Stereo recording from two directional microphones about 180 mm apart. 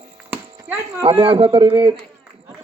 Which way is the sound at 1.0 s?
30° right (ahead or behind).